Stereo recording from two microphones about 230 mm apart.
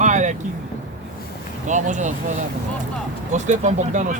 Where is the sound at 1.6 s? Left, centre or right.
Right.